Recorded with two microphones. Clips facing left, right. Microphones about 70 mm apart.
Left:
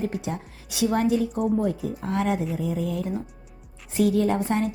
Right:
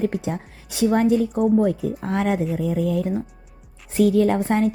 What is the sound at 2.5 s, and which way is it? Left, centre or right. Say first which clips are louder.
A woman's voice: right 5 dB; right.